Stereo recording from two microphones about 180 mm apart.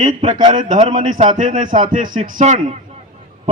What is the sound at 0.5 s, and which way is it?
A man's voice, 45° right (ahead or behind).